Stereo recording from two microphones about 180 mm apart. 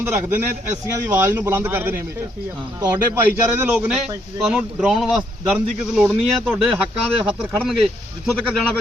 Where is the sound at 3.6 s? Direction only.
10° right (ahead or behind).